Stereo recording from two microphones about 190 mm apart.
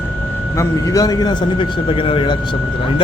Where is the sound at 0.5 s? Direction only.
15° left (ahead or behind).